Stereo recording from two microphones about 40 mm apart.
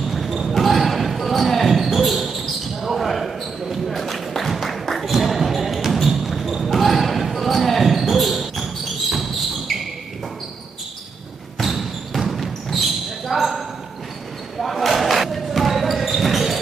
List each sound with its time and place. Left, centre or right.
0.1 s basketball bounce: centre
9.1 s a sound: centre
11.5 s basketball bounce: centre